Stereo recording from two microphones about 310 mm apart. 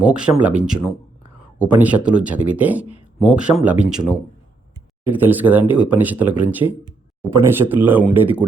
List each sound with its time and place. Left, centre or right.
0.0 s speech: centre
5.0 s speech: centre